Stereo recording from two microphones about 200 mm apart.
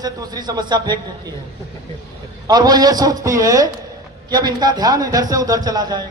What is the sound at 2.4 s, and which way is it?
Speech, 20° right (ahead or behind).